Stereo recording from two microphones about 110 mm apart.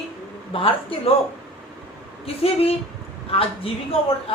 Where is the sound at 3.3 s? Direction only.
60° left (ahead or behind).